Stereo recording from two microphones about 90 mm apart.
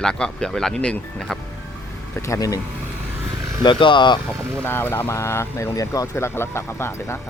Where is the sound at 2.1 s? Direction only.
35° left (ahead or behind).